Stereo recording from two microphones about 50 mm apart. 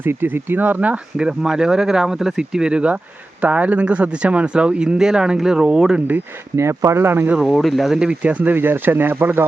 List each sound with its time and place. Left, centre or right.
0.0 s speech: right
1.2 s speech: centre
3.4 s speech: right
6.6 s speech: right
7.4 s speech: centre
7.9 s speech: centre
8.5 s speech: right